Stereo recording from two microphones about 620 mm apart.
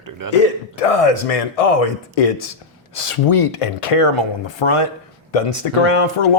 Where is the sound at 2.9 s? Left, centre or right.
Left.